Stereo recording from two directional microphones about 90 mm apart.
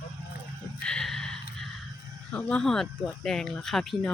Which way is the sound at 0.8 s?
5° left (ahead or behind).